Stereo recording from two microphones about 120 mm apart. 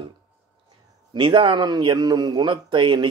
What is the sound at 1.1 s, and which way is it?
Speech, 40° right (ahead or behind).